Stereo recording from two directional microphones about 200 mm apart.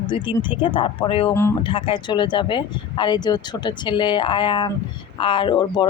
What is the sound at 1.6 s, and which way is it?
Speech, 25° left (ahead or behind).